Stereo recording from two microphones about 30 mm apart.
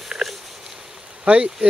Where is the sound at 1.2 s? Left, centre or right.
Right.